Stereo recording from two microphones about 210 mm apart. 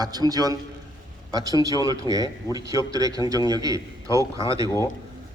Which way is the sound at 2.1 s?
20° left (ahead or behind).